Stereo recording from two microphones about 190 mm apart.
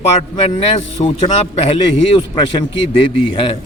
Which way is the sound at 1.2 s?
30° left (ahead or behind).